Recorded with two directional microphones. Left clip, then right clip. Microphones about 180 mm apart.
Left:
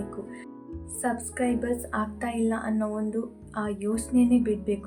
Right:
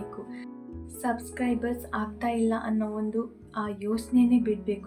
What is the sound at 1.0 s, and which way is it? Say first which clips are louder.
A woman's voice: left 2 dB; 15° left (ahead or behind).